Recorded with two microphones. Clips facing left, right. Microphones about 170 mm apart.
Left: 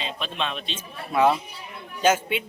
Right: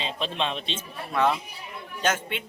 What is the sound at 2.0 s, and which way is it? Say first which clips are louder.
Speech: left 6 dB; 5° left (ahead or behind).